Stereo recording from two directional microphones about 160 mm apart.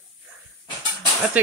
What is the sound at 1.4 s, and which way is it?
Speech, 10° right (ahead or behind).